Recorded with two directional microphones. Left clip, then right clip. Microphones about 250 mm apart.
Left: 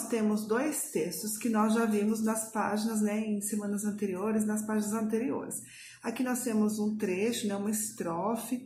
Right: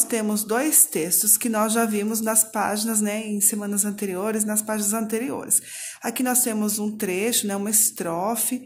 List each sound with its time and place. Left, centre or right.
0.1 s a woman's voice: right